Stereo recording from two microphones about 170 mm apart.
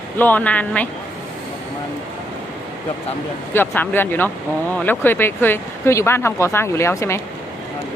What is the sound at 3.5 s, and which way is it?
Speech, 10° left (ahead or behind).